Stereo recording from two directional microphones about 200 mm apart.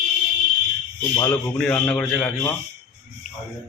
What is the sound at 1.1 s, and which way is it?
A man's voice, 15° left (ahead or behind).